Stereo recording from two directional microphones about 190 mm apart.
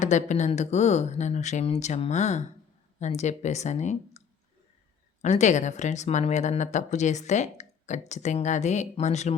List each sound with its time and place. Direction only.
0.0 s a woman's voice: 40° left (ahead or behind)
5.2 s a woman's voice: 35° left (ahead or behind)